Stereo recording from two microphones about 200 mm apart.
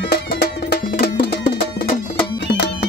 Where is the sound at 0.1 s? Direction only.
50° left (ahead or behind).